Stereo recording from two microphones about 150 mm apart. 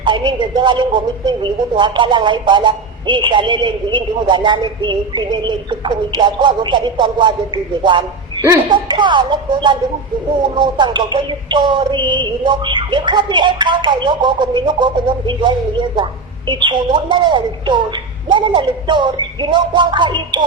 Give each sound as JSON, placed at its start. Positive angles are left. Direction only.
{"t": 0.0, "sound": "a man's voice", "side_deg": -30}